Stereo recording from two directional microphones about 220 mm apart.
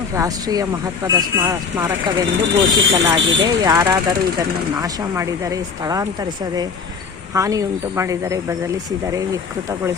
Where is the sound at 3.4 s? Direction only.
15° right (ahead or behind).